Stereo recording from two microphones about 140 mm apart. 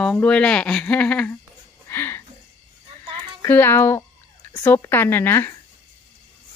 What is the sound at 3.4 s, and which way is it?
Speech, 15° left (ahead or behind).